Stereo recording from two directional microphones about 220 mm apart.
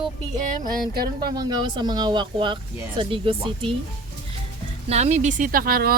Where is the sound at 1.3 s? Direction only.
20° right (ahead or behind).